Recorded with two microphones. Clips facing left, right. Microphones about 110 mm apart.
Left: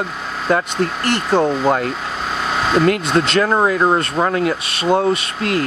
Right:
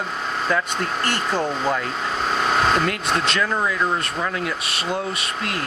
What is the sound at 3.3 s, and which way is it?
Speech, 45° left (ahead or behind).